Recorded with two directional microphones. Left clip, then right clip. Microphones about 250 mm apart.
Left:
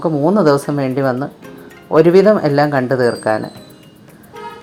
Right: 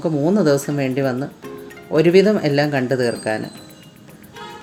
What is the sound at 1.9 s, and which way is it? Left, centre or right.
Speech, centre.